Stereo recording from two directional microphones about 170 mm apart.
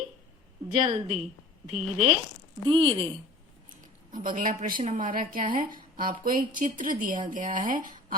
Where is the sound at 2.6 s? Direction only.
30° right (ahead or behind).